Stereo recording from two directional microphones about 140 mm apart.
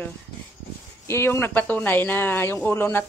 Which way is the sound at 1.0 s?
20° left (ahead or behind).